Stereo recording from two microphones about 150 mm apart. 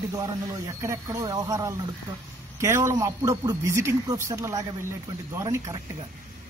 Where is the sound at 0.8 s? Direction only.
20° right (ahead or behind).